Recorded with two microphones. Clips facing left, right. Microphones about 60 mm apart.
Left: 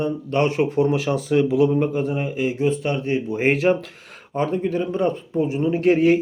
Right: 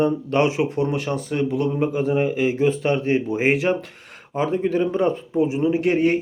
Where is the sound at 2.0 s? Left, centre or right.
Right.